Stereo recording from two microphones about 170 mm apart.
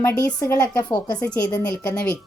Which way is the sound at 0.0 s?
10° left (ahead or behind).